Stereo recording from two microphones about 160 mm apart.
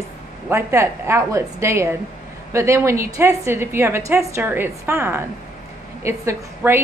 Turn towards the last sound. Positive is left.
turn(degrees=-15)  # may be behind; listen again after turning